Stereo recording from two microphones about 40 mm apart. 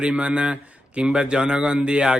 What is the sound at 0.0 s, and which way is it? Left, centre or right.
Speech, right.